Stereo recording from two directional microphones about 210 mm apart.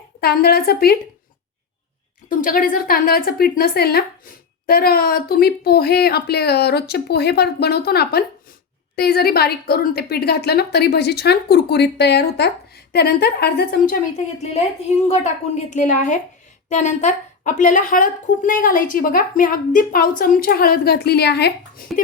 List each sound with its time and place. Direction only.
0.2 s a woman's voice: 50° left (ahead or behind)
2.4 s a woman's voice: 40° left (ahead or behind)
14.4 s a woman's voice: 30° left (ahead or behind); by 21.8 s 50° left (ahead or behind)